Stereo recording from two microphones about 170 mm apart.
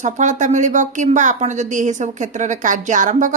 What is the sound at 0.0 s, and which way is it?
A woman's voice, 45° right (ahead or behind).